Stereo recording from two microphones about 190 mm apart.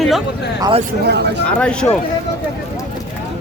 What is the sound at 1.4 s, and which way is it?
Speech, 5° left (ahead or behind).